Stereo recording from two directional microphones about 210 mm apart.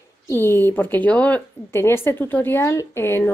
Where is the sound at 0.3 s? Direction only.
10° left (ahead or behind).